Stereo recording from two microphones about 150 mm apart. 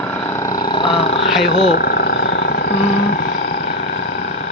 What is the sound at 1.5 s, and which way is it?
Speech, 45° left (ahead or behind).